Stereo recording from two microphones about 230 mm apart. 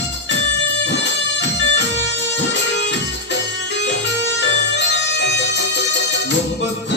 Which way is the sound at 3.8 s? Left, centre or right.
Left.